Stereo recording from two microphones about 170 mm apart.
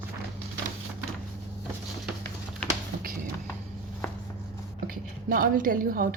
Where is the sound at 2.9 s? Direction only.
60° right (ahead or behind).